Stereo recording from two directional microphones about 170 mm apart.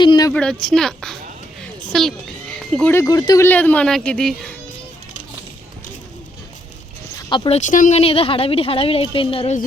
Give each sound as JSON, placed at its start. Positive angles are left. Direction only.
{"t": 0.0, "sound": "a woman's voice", "side_deg": 25}
{"t": 0.6, "sound": "a woman's voice", "side_deg": 5}
{"t": 1.6, "sound": "a sound", "side_deg": 0}
{"t": 2.9, "sound": "speech", "side_deg": 20}
{"t": 7.2, "sound": "speech", "side_deg": 30}
{"t": 7.7, "sound": "a woman's voice", "side_deg": 45}